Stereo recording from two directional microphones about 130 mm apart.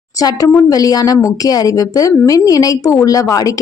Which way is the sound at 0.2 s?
25° left (ahead or behind).